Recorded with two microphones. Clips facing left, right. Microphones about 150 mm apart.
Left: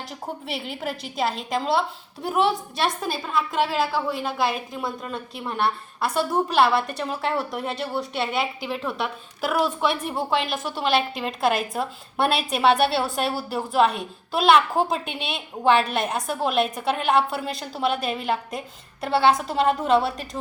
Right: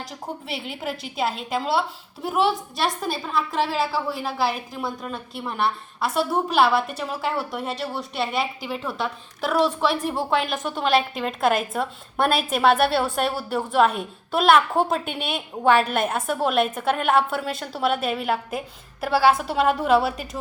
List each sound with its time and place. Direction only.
0.0 s a woman's voice: centre (ahead or behind)